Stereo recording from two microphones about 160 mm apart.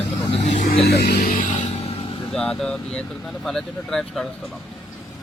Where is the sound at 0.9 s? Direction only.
85° left.